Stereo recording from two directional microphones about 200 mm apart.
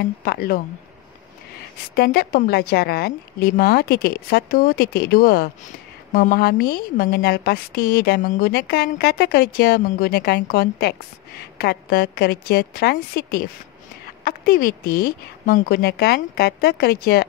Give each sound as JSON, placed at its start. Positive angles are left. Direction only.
{"t": 0.0, "sound": "a woman's voice", "side_deg": 50}
{"t": 2.0, "sound": "a woman's voice", "side_deg": 50}